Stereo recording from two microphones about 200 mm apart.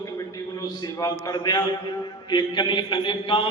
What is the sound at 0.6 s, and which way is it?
A man's voice, 20° left (ahead or behind).